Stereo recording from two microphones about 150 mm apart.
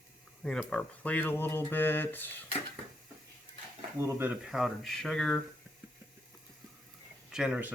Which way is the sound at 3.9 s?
20° right (ahead or behind).